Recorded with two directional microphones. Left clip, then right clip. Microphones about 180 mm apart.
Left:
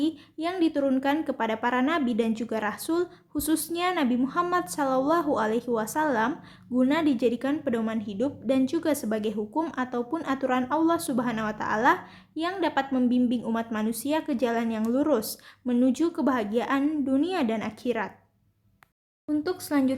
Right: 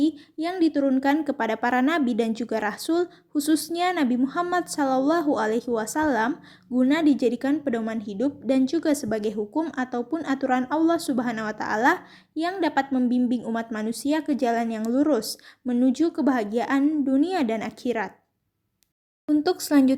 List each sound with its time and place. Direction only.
0.0 s a woman's voice: 25° right (ahead or behind)
19.3 s a woman's voice: 35° right (ahead or behind)